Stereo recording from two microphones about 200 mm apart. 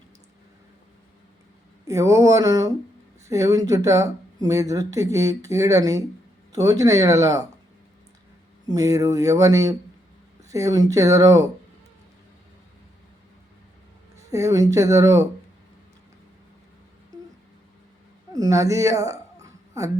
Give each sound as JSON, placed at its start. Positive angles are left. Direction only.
{"t": 1.9, "sound": "speech", "side_deg": -15}
{"t": 8.6, "sound": "speech", "side_deg": -15}
{"t": 14.3, "sound": "speech", "side_deg": -15}
{"t": 18.3, "sound": "speech", "side_deg": -15}